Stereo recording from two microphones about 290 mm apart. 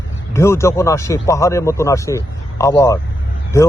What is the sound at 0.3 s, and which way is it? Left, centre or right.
Speech, centre.